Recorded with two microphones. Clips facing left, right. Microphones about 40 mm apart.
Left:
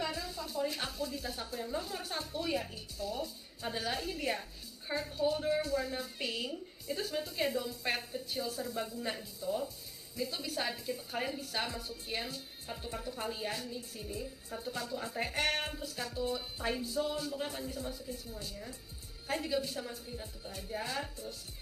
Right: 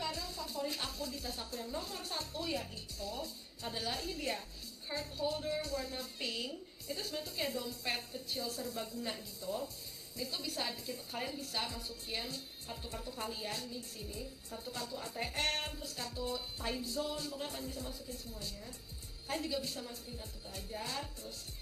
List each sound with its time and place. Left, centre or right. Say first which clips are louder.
0.0 s speech: left 3 dB; centre